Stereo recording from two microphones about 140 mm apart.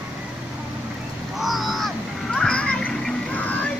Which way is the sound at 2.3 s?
5° left (ahead or behind).